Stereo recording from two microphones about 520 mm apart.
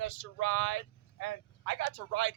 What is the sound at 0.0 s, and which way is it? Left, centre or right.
Speech, left.